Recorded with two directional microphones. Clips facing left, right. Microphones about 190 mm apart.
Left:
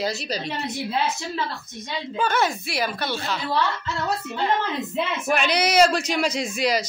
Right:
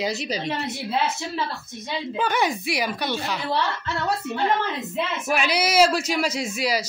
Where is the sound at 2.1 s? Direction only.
15° right (ahead or behind).